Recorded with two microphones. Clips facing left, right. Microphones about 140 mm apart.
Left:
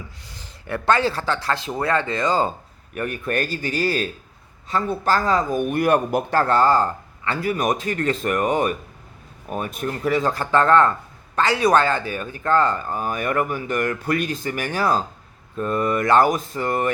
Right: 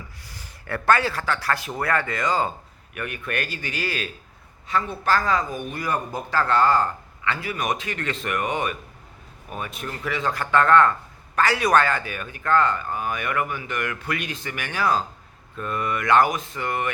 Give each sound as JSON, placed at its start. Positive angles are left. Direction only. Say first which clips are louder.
{"t": 0.3, "sound": "speech", "louder": "left 2 dB", "side_deg": 20}
{"t": 6.4, "sound": "speech", "louder": "left 1 dB", "side_deg": 35}